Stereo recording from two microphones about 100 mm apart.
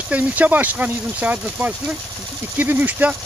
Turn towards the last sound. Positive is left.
turn(degrees=-15)  # may be behind; listen again after turning